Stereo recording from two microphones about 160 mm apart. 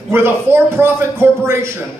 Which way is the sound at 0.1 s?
15° right (ahead or behind).